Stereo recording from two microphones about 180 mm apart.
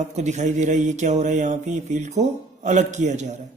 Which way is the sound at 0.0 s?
40° right (ahead or behind).